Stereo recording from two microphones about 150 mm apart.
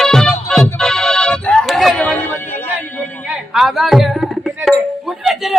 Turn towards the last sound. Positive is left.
turn(degrees=0)  # may be behind; listen again after turning